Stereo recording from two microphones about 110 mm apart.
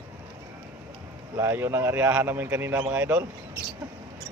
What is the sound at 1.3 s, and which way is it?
Speech, 20° right (ahead or behind).